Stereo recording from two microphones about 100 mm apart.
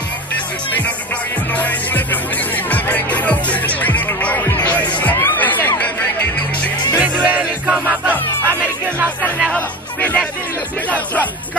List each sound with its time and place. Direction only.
1.5 s music: 15° left (ahead or behind)
7.0 s music: 15° right (ahead or behind)
9.5 s music: 15° left (ahead or behind)